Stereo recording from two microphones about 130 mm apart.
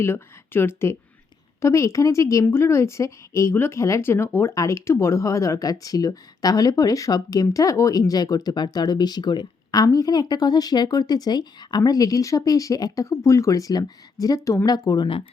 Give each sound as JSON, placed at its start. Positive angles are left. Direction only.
{"t": 0.0, "sound": "speech", "side_deg": 15}